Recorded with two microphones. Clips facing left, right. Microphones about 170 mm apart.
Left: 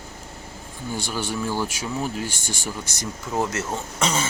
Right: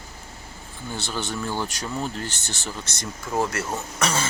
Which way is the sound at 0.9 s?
10° left (ahead or behind).